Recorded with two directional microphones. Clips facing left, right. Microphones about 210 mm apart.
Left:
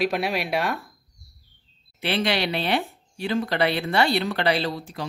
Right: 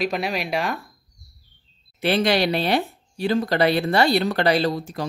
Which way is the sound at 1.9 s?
45° right (ahead or behind).